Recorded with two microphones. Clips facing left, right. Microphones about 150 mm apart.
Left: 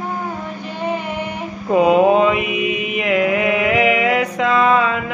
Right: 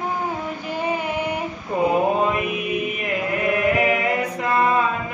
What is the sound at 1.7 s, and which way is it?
Mantra, 90° left.